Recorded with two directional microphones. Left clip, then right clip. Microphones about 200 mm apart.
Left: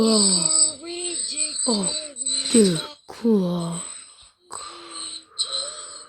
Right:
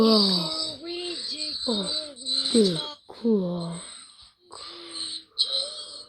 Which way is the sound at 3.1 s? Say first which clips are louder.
Left 4 dB; 45° left (ahead or behind).